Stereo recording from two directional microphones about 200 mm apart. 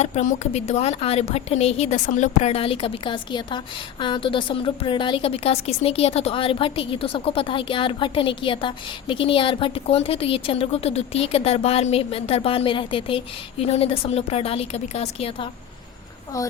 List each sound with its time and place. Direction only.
0.0 s a woman's voice: 35° left (ahead or behind)